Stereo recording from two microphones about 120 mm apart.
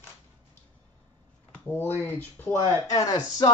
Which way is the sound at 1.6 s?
15° left (ahead or behind).